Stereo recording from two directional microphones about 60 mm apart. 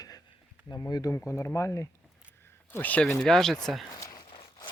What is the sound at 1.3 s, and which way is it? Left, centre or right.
Speech, left.